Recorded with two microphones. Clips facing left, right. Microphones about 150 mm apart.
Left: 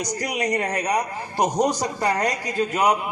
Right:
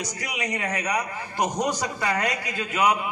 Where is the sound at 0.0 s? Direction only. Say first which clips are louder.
Left 6 dB; 40° left (ahead or behind).